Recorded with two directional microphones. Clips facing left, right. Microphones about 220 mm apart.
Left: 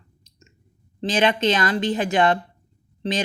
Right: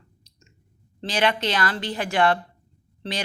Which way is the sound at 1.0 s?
20° left (ahead or behind).